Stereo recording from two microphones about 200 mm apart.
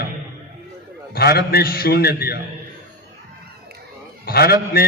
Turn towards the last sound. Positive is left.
turn(degrees=50)  # may be behind; listen again after turning